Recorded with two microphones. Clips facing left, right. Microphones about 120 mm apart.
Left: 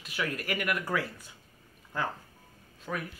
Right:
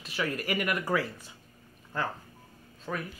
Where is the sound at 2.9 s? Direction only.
5° right (ahead or behind).